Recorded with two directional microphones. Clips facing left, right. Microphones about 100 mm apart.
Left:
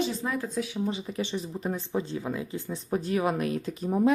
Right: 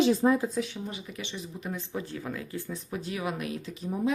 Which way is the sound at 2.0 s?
20° left (ahead or behind).